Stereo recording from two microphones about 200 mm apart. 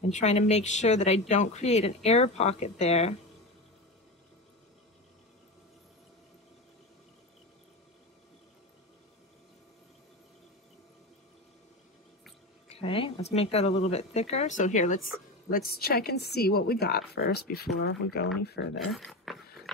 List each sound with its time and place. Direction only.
0.1 s speech: 35° left (ahead or behind)
12.6 s speech: 30° left (ahead or behind); by 18.7 s 55° left (ahead or behind)
18.9 s dog: centre (ahead or behind)